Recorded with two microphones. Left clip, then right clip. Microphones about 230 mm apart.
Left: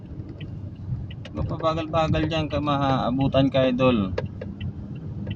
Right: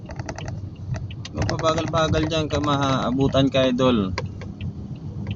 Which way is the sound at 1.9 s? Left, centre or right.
Centre.